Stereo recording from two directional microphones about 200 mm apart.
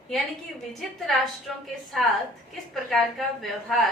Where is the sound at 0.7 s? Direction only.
Centre (ahead or behind).